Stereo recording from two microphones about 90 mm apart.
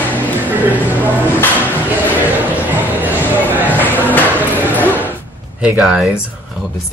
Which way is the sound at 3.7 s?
20° left (ahead or behind).